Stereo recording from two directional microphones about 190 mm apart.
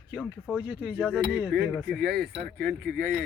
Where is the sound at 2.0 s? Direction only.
55° right (ahead or behind).